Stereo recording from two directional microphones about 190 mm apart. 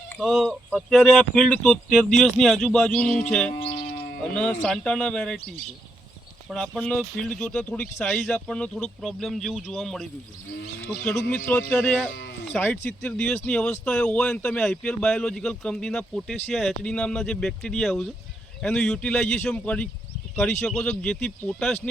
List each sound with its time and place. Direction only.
0.1 s speech: centre (ahead or behind)
3.9 s music: 55° left (ahead or behind)
4.6 s speech: 5° left (ahead or behind)
6.5 s speech: 5° left (ahead or behind)
11.3 s music: 10° left (ahead or behind)
12.1 s speech: 65° left (ahead or behind)
12.5 s speech: 10° left (ahead or behind)